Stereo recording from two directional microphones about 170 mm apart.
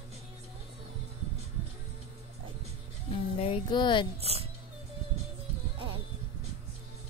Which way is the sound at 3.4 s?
35° left (ahead or behind).